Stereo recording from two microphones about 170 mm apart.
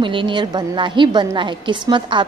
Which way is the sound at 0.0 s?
30° right (ahead or behind).